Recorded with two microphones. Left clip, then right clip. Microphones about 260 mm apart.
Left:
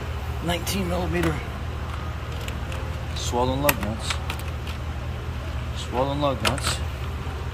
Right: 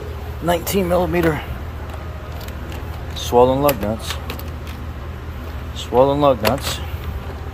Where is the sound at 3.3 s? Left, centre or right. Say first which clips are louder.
Right 12 dB; right.